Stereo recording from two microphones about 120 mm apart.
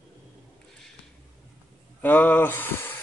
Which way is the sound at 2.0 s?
15° left (ahead or behind).